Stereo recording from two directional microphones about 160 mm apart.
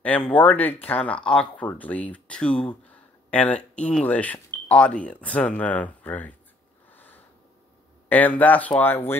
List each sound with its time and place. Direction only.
0.0 s speech: 10° left (ahead or behind)
6.9 s a sound: 10° left (ahead or behind)
8.1 s speech: 10° left (ahead or behind)